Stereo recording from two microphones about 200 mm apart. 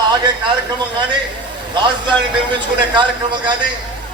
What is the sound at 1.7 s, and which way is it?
A man's voice, 25° right (ahead or behind).